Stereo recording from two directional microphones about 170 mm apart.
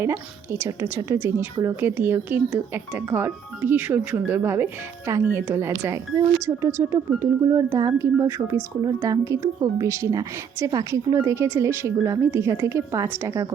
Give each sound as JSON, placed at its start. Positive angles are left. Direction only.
{"t": 0.6, "sound": "speech", "side_deg": -15}